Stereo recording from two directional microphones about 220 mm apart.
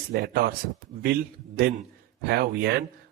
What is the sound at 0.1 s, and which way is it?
A man's voice, 45° right (ahead or behind).